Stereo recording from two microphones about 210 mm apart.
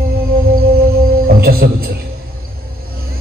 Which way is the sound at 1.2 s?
45° right (ahead or behind).